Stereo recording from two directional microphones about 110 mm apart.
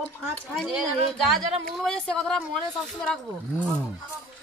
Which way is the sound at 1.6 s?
5° left (ahead or behind).